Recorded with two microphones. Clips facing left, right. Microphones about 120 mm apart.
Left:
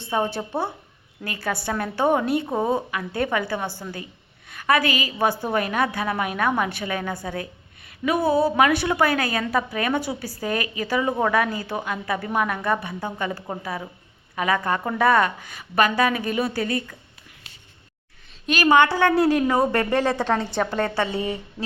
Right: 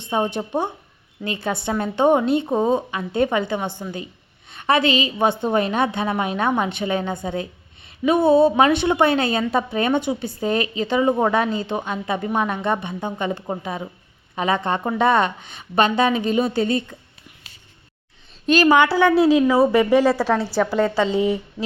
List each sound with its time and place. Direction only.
0.0 s a woman's voice: 20° right (ahead or behind)
18.9 s a woman's voice: 15° right (ahead or behind)